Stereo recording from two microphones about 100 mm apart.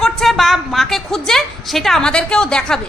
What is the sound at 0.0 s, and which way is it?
A woman's voice, centre (ahead or behind).